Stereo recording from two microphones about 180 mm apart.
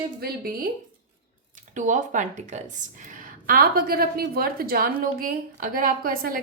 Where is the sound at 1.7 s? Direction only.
45° right (ahead or behind).